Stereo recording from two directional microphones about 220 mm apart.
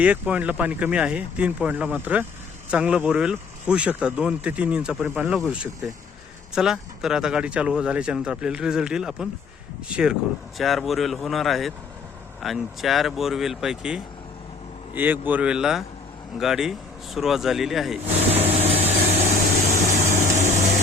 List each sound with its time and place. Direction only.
0.0 s speech: 5° right (ahead or behind)
18.3 s vehicle: 30° right (ahead or behind)